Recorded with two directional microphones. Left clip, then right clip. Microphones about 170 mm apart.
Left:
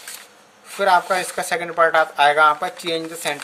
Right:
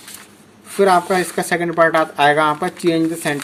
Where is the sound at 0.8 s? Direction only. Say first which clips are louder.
Right 3 dB; 10° right (ahead or behind).